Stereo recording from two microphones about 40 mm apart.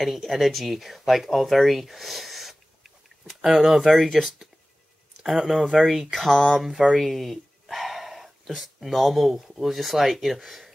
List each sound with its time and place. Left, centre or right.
0.0 s speech: centre
5.2 s speech: centre
5.5 s speech: centre